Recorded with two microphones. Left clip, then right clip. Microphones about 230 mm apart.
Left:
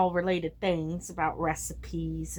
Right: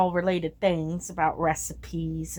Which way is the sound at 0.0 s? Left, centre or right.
Right.